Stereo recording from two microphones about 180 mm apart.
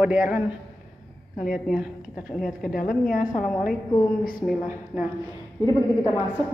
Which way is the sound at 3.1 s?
45° left (ahead or behind).